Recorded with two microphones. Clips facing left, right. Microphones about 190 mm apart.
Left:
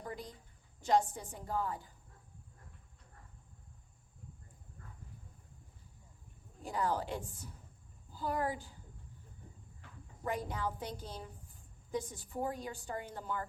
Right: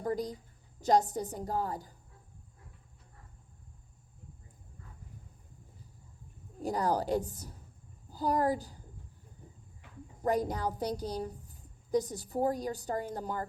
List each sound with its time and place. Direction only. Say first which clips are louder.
0.0 s a woman's voice: right 11 dB; 40° right (ahead or behind)
6.6 s a woman's voice: right 5 dB; 40° right (ahead or behind)
10.2 s a woman's voice: right 7 dB; 40° right (ahead or behind)